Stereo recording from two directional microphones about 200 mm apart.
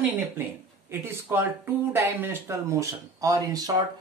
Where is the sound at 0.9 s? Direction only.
10° right (ahead or behind).